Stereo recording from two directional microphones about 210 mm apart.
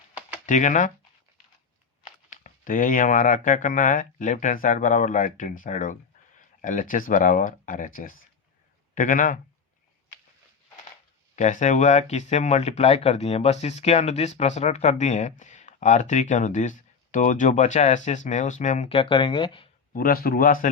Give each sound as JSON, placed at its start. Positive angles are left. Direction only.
{"t": 0.1, "sound": "typewriter", "side_deg": -5}
{"t": 0.4, "sound": "speech", "side_deg": 35}
{"t": 2.0, "sound": "speech", "side_deg": 40}
{"t": 11.3, "sound": "speech", "side_deg": 35}
{"t": 19.9, "sound": "speech", "side_deg": 45}